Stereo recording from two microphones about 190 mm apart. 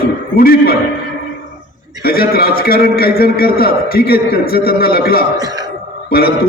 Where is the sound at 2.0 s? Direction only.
55° left (ahead or behind).